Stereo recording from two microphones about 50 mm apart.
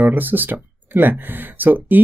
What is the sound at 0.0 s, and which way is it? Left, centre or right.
Speech, right.